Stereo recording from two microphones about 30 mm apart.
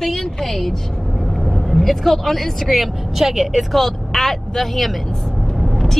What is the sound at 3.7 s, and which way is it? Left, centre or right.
A woman's voice, centre.